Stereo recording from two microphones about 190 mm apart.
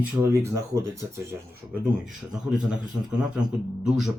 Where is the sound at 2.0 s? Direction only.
Centre (ahead or behind).